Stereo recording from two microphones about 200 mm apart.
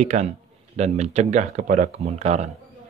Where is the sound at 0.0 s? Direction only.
35° right (ahead or behind).